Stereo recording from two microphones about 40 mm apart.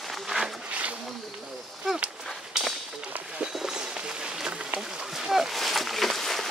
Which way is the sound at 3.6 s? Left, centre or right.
Centre.